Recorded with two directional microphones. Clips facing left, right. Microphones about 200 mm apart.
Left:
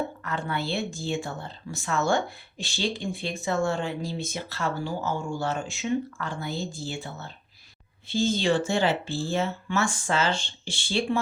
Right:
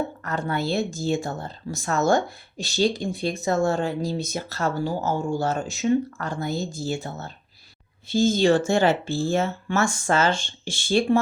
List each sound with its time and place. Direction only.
0.2 s speech: 40° right (ahead or behind)